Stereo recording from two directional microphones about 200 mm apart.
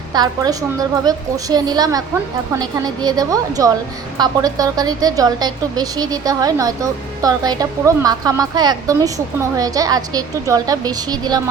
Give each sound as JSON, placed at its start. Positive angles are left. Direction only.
{"t": 0.1, "sound": "a woman's voice", "side_deg": -20}